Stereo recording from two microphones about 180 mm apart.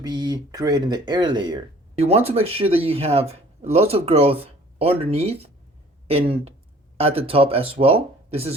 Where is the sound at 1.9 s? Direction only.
35° right (ahead or behind).